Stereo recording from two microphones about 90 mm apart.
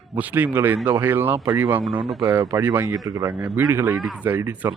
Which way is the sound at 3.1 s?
35° right (ahead or behind).